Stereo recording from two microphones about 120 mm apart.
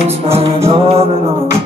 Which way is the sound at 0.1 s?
55° right (ahead or behind).